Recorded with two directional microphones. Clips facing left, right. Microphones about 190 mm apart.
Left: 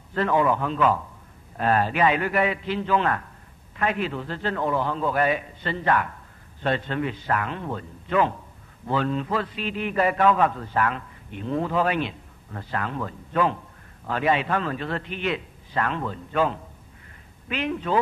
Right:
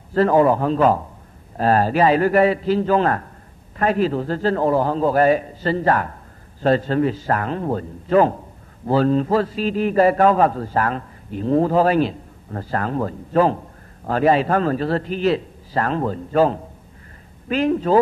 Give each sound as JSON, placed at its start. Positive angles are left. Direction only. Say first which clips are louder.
{"t": 0.1, "sound": "a man's voice", "louder": "right 7 dB", "side_deg": -40}